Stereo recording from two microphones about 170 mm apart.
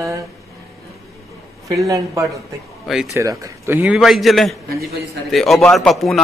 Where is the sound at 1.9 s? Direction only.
20° right (ahead or behind).